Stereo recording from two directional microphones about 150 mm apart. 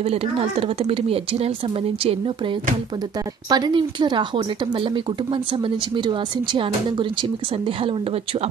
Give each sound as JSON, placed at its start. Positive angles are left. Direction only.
{"t": 0.0, "sound": "speech", "side_deg": -40}
{"t": 3.4, "sound": "speech", "side_deg": -30}